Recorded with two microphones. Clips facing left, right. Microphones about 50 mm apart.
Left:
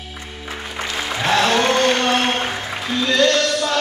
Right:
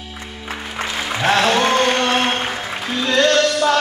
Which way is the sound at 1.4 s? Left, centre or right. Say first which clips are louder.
Left 1 dB; centre.